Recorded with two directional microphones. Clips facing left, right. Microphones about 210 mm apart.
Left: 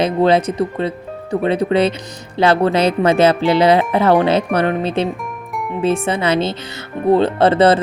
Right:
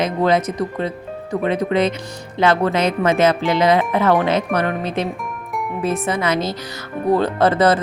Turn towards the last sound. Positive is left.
turn(degrees=30)  # may be behind; listen again after turning